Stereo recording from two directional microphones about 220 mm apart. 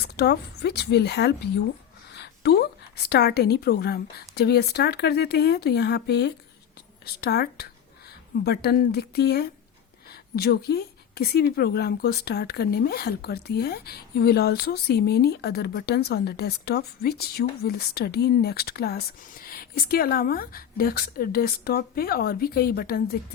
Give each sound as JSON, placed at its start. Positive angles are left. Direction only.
{"t": 0.0, "sound": "a woman's voice", "side_deg": 50}